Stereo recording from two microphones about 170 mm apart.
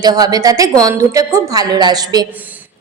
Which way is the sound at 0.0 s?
25° right (ahead or behind).